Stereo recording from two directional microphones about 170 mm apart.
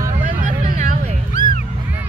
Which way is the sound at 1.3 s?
50° left (ahead or behind).